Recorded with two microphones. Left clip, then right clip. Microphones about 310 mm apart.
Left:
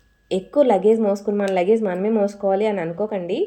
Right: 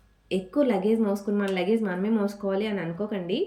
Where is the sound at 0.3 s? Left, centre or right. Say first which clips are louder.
Left 8 dB; centre.